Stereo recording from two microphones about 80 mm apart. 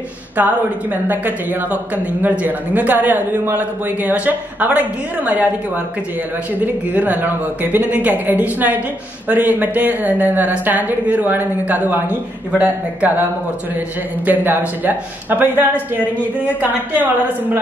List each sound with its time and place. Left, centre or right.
0.4 s a woman's voice: right
6.6 s a woman's voice: right